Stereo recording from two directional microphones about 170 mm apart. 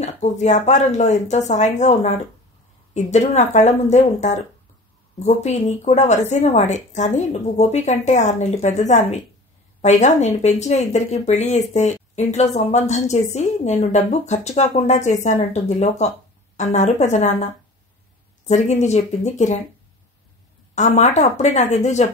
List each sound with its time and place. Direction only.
0.0 s speech: 45° left (ahead or behind)
18.5 s speech: 40° left (ahead or behind)
20.7 s speech: 40° left (ahead or behind)